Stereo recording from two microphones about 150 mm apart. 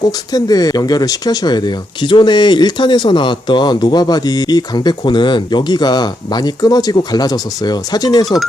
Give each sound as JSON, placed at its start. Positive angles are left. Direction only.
{"t": 0.3, "sound": "speech", "side_deg": 25}
{"t": 8.2, "sound": "speech", "side_deg": 0}